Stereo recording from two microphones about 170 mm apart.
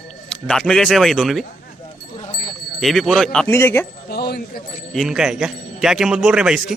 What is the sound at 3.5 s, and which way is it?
Speech, 15° left (ahead or behind).